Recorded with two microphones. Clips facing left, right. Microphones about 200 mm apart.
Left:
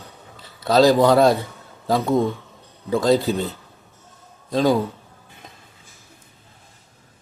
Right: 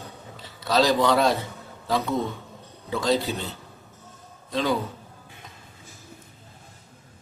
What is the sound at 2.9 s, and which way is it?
Speech, 45° left (ahead or behind).